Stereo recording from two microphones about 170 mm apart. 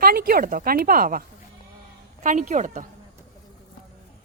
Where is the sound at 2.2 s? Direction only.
45° right (ahead or behind).